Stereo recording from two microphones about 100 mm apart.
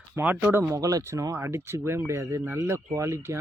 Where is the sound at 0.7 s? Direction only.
35° right (ahead or behind).